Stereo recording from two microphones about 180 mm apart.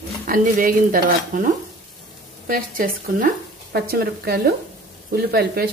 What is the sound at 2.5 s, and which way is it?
Speech, 50° right (ahead or behind).